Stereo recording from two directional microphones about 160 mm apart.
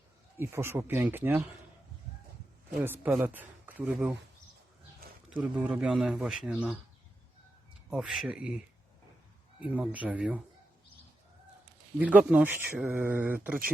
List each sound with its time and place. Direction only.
0.3 s speech: 15° right (ahead or behind)
2.8 s speech: 10° right (ahead or behind)
5.4 s a man's voice: 5° right (ahead or behind)
7.9 s a man's voice: 5° right (ahead or behind)
9.6 s speech: 10° right (ahead or behind)
11.9 s speech: 10° right (ahead or behind)